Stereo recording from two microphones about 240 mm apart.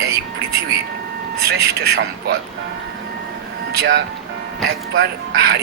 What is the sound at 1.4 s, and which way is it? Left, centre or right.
Speech, right.